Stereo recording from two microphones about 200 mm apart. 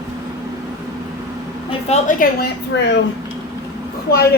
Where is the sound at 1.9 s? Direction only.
45° left (ahead or behind); by 3.0 s 60° left (ahead or behind).